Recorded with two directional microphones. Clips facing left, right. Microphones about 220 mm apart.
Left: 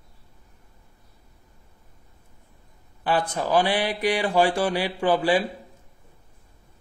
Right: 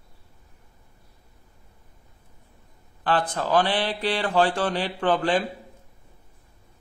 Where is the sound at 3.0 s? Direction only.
10° left (ahead or behind).